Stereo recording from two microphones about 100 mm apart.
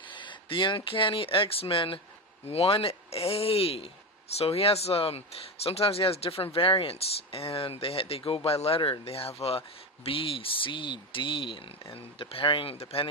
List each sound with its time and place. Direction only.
0.1 s speech: 55° left (ahead or behind)
2.4 s speech: 80° left